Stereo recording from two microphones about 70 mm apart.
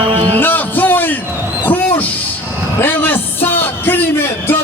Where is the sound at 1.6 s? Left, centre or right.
Left.